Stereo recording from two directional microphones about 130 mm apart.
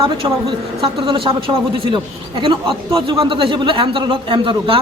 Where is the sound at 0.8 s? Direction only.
40° right (ahead or behind).